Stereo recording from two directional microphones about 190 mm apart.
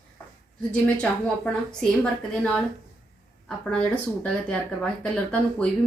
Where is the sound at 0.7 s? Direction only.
5° left (ahead or behind).